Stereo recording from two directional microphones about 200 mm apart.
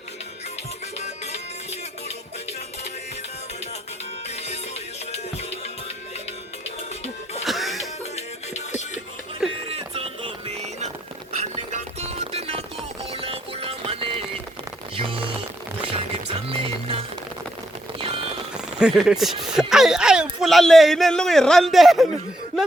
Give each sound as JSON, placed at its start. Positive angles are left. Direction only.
{"t": 0.9, "sound": "music", "side_deg": 35}
{"t": 5.1, "sound": "music", "side_deg": 30}
{"t": 7.4, "sound": "music", "side_deg": 0}
{"t": 8.1, "sound": "music", "side_deg": 35}
{"t": 9.6, "sound": "music", "side_deg": -30}
{"t": 14.9, "sound": "a sound", "side_deg": -25}
{"t": 15.8, "sound": "music", "side_deg": -25}
{"t": 18.8, "sound": "speech", "side_deg": -5}